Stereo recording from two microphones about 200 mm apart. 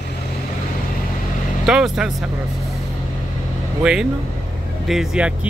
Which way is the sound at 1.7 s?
5° right (ahead or behind).